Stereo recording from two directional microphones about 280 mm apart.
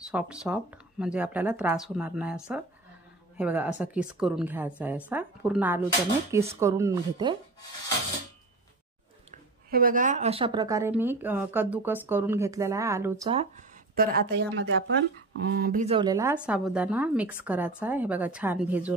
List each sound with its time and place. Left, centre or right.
0.1 s a woman's voice: centre
9.7 s speech: right; by 13.3 s centre
13.3 s a woman's voice: right; by 18.9 s centre